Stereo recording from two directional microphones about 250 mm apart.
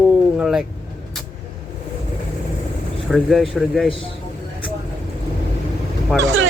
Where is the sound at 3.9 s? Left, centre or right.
Left.